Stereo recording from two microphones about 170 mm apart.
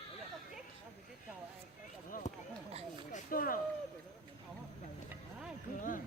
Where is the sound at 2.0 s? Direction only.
50° left (ahead or behind).